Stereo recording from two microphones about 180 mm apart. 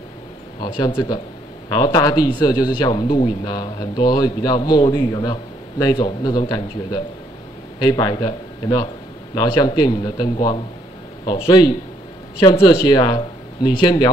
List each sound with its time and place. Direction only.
0.6 s a man's voice: 25° left (ahead or behind)
7.8 s a man's voice: 25° left (ahead or behind)
12.8 s speech: 25° left (ahead or behind)